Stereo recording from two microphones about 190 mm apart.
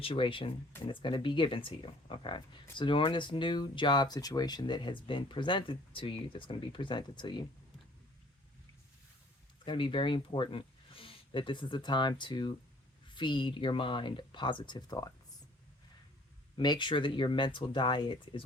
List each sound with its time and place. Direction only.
0.0 s speech: 25° left (ahead or behind)
9.6 s speech: 25° left (ahead or behind)
16.6 s speech: 25° left (ahead or behind)